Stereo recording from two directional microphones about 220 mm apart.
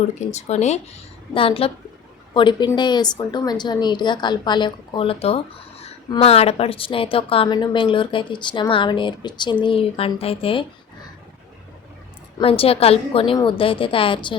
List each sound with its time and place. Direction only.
0.3 s a woman's voice: 30° left (ahead or behind)
12.4 s a woman's voice: 25° left (ahead or behind)